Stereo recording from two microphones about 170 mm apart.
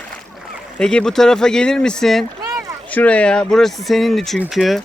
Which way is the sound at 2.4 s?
20° right (ahead or behind).